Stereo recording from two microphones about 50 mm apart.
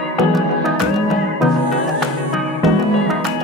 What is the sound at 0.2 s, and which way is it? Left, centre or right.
Music, centre.